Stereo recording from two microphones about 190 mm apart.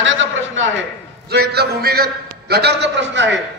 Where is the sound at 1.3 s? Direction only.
55° right (ahead or behind).